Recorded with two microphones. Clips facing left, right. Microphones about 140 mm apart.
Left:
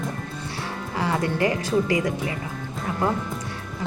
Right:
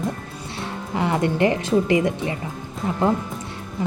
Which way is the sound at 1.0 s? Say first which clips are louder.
Right 3 dB; 20° right (ahead or behind).